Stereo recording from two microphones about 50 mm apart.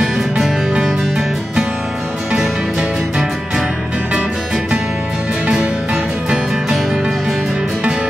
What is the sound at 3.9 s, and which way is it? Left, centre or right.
Music, right.